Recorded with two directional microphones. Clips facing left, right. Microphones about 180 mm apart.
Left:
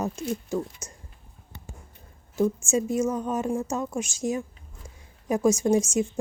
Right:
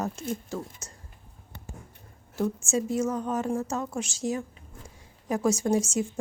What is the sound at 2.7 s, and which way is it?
A woman's voice, 15° left (ahead or behind).